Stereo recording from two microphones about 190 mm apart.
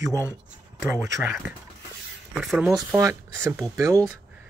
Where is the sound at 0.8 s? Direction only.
10° right (ahead or behind).